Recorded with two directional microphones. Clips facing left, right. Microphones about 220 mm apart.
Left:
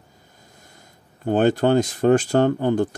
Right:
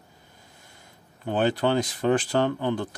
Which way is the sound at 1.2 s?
45° left (ahead or behind).